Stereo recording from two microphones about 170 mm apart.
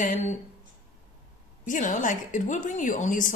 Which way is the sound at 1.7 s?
50° left (ahead or behind).